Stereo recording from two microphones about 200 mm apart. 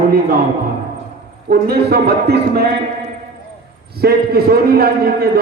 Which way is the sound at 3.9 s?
50° right (ahead or behind).